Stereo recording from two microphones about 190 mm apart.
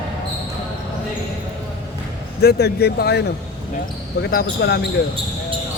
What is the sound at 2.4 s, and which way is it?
Speech, 55° left (ahead or behind).